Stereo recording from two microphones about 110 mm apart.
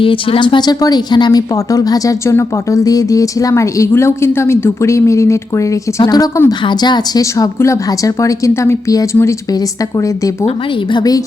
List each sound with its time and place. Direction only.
0.0 s speech: 55° left (ahead or behind); by 9.0 s 30° left (ahead or behind)
10.9 s speech: 35° left (ahead or behind)